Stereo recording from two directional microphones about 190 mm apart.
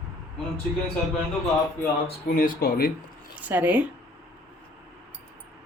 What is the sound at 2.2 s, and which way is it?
Speech, 45° left (ahead or behind).